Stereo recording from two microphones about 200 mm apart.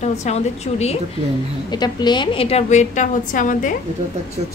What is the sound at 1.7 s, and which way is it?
A woman's voice, 20° left (ahead or behind).